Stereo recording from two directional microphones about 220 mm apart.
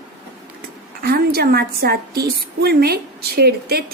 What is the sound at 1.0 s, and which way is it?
A woman's voice, 45° right (ahead or behind).